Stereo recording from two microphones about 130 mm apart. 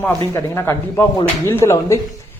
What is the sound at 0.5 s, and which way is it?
Speech, 20° left (ahead or behind).